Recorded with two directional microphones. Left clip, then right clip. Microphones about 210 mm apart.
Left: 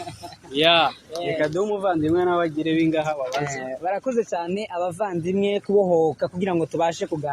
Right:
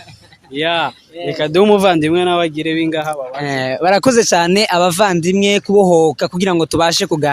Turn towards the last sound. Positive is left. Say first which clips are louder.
# right 10 dB
turn(degrees=-60)  # may be behind; listen again after turning